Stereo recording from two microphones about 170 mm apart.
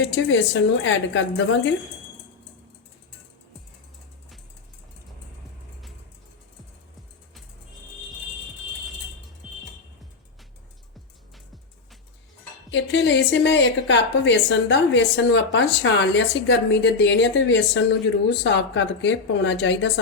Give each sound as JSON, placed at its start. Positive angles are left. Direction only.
{"t": 0.0, "sound": "a woman's voice", "side_deg": 90}
{"t": 12.7, "sound": "a woman's voice", "side_deg": 90}